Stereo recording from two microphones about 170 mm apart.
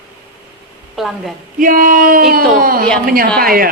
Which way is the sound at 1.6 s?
55° right (ahead or behind).